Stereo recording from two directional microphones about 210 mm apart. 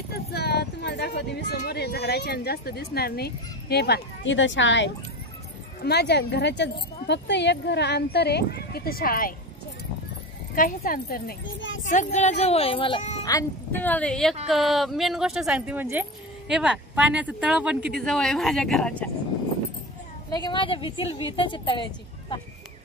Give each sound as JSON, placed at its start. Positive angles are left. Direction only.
{"t": 0.3, "sound": "music", "side_deg": 50}
{"t": 1.6, "sound": "speech", "side_deg": 50}
{"t": 10.5, "sound": "speech", "side_deg": 40}
{"t": 11.9, "sound": "speech", "side_deg": 35}
{"t": 13.2, "sound": "a woman's voice", "side_deg": 15}
{"t": 20.2, "sound": "a woman's voice", "side_deg": 20}